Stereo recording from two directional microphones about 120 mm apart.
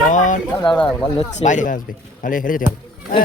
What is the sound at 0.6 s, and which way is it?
Speech, 40° left (ahead or behind).